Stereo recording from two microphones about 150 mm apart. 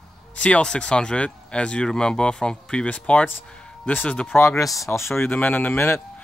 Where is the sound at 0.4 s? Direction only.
5° left (ahead or behind).